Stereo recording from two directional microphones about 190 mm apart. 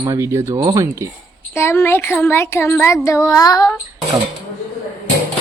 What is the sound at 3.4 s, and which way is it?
Child singing, 20° left (ahead or behind).